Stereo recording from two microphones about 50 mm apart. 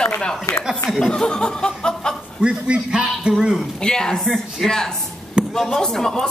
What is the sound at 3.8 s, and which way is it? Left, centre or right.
Speech, centre.